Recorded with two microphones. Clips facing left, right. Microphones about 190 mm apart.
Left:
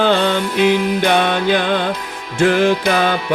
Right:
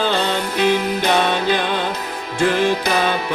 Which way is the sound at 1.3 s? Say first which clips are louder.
Left 3 dB; 60° left (ahead or behind).